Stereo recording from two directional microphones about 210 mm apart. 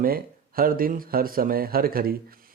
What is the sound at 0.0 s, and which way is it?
Speech, 45° right (ahead or behind).